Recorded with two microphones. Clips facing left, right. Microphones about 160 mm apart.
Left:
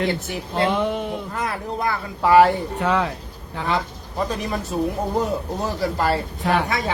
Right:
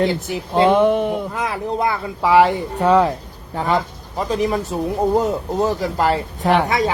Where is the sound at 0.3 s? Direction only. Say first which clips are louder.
Right 7 dB; 90° right.